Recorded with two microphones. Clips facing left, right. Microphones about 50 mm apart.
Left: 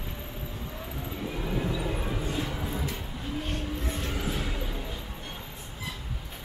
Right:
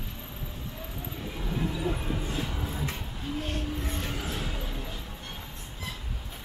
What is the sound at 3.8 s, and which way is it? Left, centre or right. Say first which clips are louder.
Music: left 2 dB; centre.